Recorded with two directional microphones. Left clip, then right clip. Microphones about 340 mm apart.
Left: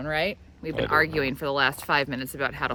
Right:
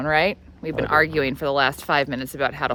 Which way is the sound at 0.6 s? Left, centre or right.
Centre.